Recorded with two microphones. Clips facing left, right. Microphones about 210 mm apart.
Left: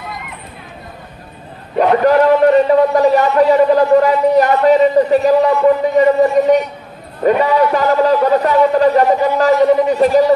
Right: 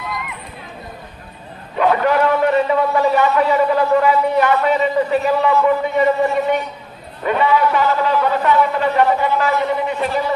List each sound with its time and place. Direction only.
2.0 s a man's voice: 40° left (ahead or behind)